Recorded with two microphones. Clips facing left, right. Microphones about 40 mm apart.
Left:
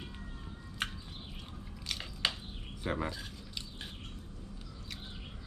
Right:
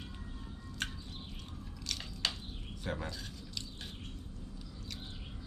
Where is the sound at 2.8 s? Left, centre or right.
Left.